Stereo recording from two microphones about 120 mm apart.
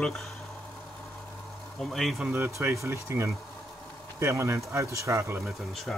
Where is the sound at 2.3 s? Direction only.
20° right (ahead or behind).